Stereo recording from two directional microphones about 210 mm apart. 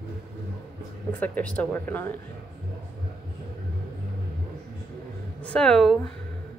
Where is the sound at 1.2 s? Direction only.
5° left (ahead or behind).